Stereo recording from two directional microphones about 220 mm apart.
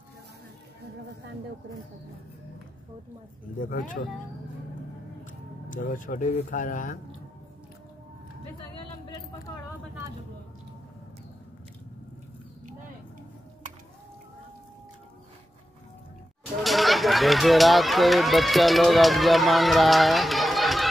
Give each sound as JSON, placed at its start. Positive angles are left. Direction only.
{"t": 3.5, "sound": "speech", "side_deg": 35}
{"t": 5.2, "sound": "speech", "side_deg": 35}
{"t": 16.6, "sound": "speech", "side_deg": 0}